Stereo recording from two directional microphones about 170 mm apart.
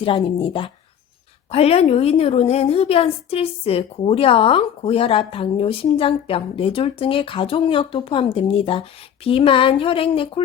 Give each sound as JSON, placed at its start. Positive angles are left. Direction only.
{"t": 0.0, "sound": "a woman's voice", "side_deg": 30}